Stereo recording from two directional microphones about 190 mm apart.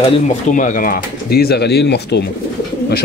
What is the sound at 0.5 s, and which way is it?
Speech, 40° left (ahead or behind).